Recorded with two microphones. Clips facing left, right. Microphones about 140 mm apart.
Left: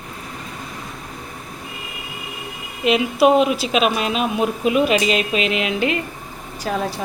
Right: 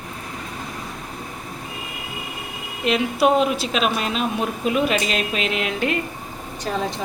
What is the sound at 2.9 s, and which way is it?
Speech, 5° left (ahead or behind).